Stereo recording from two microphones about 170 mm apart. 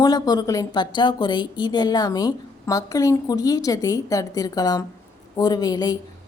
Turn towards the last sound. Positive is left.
turn(degrees=25)  # may be behind; listen again after turning